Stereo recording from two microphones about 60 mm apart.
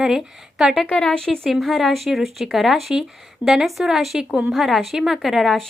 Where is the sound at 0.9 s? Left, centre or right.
Centre.